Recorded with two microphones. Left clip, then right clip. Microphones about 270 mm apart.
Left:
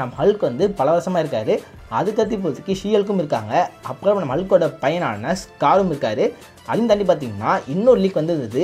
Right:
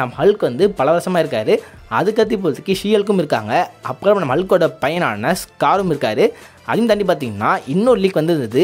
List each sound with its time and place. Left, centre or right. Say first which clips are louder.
0.0 s speech: right 3 dB; right